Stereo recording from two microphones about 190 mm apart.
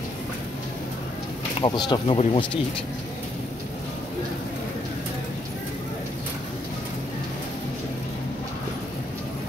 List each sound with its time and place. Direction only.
1.6 s speech: 25° left (ahead or behind)